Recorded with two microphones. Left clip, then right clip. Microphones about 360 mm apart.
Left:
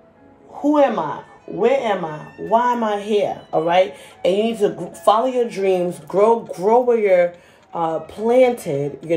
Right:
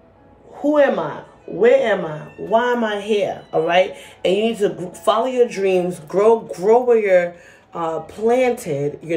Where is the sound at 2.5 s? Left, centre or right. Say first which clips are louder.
Even; centre.